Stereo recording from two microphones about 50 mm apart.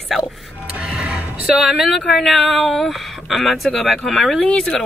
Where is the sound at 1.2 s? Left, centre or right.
Right.